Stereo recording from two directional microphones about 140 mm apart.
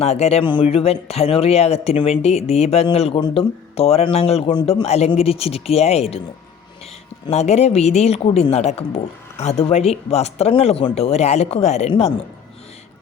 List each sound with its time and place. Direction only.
0.0 s speech: 50° left (ahead or behind)
7.3 s speech: 50° left (ahead or behind)